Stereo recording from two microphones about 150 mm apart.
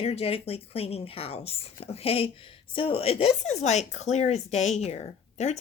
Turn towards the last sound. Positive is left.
turn(degrees=45)  # may be behind; listen again after turning